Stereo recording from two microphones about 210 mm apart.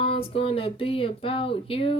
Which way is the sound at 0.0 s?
30° left (ahead or behind).